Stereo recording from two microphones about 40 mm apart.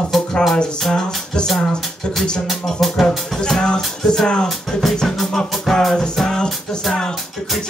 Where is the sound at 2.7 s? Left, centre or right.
Centre.